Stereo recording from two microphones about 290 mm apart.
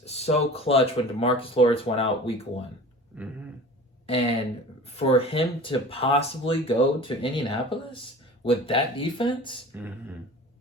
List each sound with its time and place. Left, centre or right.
0.0 s speech: left
3.1 s dog: centre
4.0 s speech: left